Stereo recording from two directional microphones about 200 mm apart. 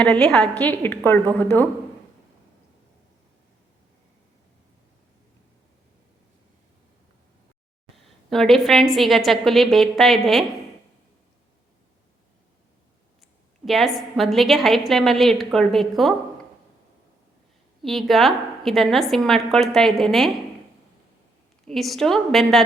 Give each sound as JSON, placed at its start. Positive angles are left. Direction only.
{"t": 0.0, "sound": "a woman's voice", "side_deg": 5}
{"t": 7.9, "sound": "a woman's voice", "side_deg": 0}
{"t": 13.7, "sound": "a woman's voice", "side_deg": 0}
{"t": 17.8, "sound": "a woman's voice", "side_deg": 0}
{"t": 21.7, "sound": "a woman's voice", "side_deg": 0}